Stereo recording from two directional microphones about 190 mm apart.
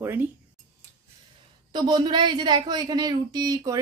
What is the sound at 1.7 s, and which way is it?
A woman's voice, 25° right (ahead or behind).